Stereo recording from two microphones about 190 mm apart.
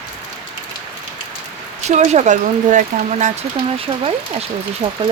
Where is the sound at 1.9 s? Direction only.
35° right (ahead or behind).